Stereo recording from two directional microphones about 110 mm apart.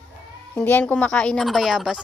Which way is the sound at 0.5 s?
15° left (ahead or behind).